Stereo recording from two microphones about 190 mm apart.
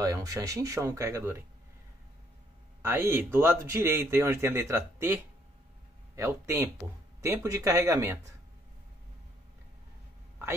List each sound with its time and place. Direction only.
0.0 s speech: 20° right (ahead or behind)
2.8 s speech: 15° right (ahead or behind)